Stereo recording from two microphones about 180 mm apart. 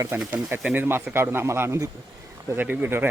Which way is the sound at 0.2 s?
5° right (ahead or behind).